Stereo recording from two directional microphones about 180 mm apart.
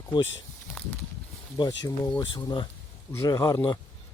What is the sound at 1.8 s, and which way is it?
A man's voice, 20° left (ahead or behind).